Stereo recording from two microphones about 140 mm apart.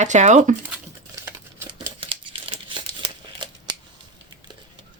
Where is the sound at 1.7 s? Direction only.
35° right (ahead or behind).